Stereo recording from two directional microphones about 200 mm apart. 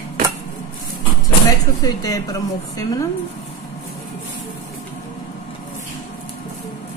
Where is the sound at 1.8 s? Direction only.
15° left (ahead or behind).